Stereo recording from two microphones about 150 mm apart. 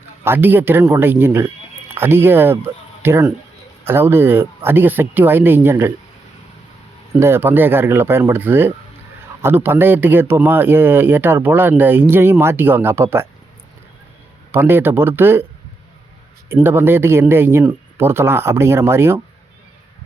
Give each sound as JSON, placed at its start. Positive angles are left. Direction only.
{"t": 0.3, "sound": "a man's voice", "side_deg": -15}
{"t": 7.2, "sound": "a man's voice", "side_deg": -15}
{"t": 14.5, "sound": "a man's voice", "side_deg": -15}
{"t": 16.6, "sound": "a man's voice", "side_deg": -15}